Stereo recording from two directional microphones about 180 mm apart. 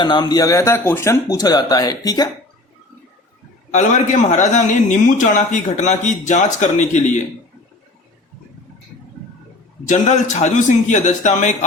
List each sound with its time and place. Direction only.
0.0 s speech: 25° left (ahead or behind)
3.7 s a man's voice: 40° left (ahead or behind)
9.9 s a man's voice: 40° left (ahead or behind)